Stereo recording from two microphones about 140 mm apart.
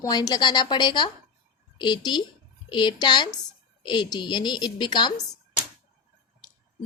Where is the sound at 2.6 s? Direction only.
35° left (ahead or behind).